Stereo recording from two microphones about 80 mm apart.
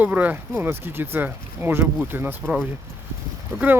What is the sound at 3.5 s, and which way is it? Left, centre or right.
Speech, right.